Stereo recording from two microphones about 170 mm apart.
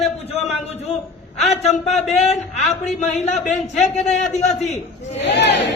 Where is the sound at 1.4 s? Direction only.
40° left (ahead or behind).